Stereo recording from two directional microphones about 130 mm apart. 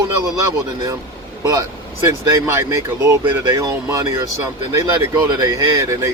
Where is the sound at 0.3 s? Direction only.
25° right (ahead or behind).